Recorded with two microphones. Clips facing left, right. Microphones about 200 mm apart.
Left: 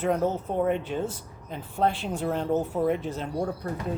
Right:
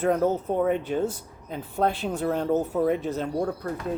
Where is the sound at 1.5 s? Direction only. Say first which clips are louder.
Right 1 dB; 40° right (ahead or behind).